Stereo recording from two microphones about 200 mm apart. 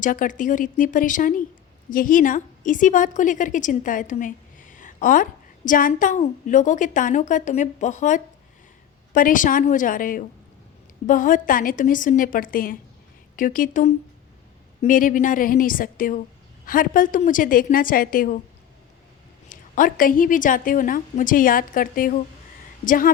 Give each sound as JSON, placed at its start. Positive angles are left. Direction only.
{"t": 0.0, "sound": "a woman's voice", "side_deg": 40}
{"t": 19.5, "sound": "a woman's voice", "side_deg": 40}